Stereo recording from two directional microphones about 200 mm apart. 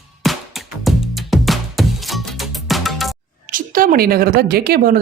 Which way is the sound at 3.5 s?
45° right (ahead or behind).